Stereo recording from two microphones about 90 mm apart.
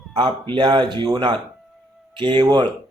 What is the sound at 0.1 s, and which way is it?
Speech, 50° right (ahead or behind).